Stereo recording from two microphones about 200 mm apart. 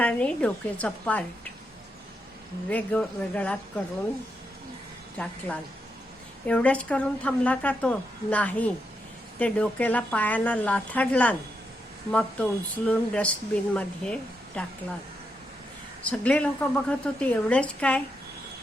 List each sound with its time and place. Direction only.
0.0 s a woman's voice: 5° left (ahead or behind)
2.6 s a woman's voice: 5° left (ahead or behind)
5.1 s a woman's voice: 5° left (ahead or behind)
16.0 s a woman's voice: 5° left (ahead or behind)